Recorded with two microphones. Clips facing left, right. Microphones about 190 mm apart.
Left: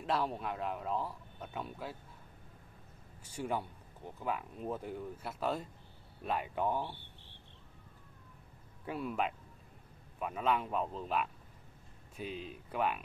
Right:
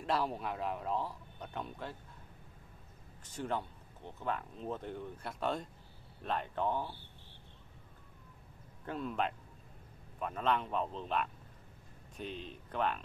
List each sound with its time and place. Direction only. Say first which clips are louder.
0.0 s speech: even; centre (ahead or behind)
3.3 s speech: left 1 dB; 10° left (ahead or behind)
8.8 s speech: even; 10° left (ahead or behind)